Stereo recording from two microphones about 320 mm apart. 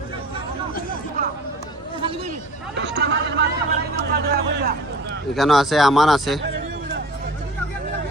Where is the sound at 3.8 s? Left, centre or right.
Right.